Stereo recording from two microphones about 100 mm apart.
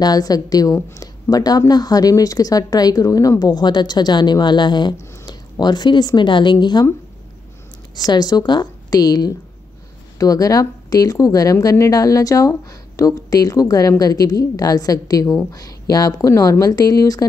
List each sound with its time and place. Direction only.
0.0 s a woman's voice: 40° left (ahead or behind)
7.9 s a woman's voice: 40° left (ahead or behind)